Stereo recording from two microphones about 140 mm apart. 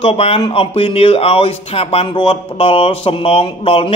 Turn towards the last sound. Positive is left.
turn(degrees=40)  # may be behind; listen again after turning